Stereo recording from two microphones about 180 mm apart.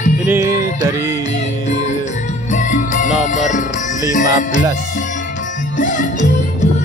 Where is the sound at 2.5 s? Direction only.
45° left (ahead or behind).